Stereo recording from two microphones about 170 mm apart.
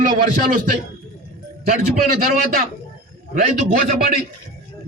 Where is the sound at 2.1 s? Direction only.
60° right (ahead or behind).